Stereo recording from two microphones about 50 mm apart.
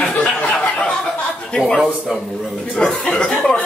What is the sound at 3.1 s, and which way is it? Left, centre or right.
Speech, centre.